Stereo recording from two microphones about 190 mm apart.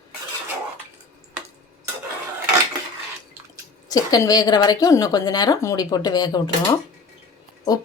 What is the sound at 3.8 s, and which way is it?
A woman's voice, 20° left (ahead or behind).